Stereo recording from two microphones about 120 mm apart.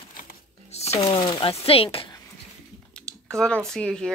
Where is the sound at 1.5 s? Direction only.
55° left (ahead or behind).